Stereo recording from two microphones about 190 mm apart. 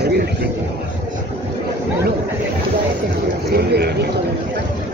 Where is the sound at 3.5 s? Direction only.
60° right (ahead or behind).